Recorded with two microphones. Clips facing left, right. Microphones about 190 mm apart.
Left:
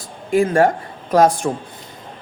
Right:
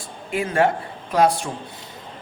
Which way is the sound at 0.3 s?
45° left (ahead or behind).